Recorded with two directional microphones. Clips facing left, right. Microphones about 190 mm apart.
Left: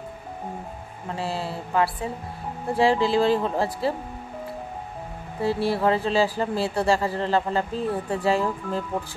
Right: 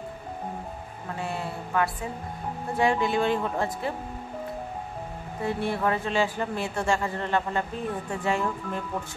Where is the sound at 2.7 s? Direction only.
30° left (ahead or behind).